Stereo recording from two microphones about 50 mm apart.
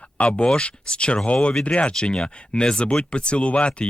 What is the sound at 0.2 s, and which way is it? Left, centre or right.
Speech, left.